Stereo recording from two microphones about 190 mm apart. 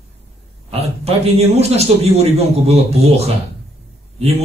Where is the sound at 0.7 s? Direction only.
30° right (ahead or behind).